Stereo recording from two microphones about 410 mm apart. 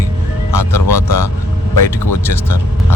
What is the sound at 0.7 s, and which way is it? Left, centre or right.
Speech, left.